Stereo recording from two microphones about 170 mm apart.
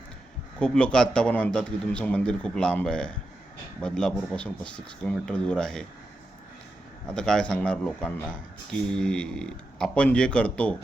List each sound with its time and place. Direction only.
0.6 s a man's voice: 5° left (ahead or behind)
7.1 s a man's voice: 5° left (ahead or behind)